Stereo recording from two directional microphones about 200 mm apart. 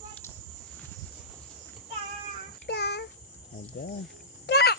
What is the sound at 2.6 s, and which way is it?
Child singing, 55° left (ahead or behind).